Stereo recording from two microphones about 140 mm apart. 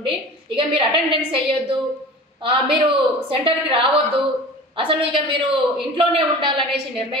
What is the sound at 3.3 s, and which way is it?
A woman's voice, 40° right (ahead or behind).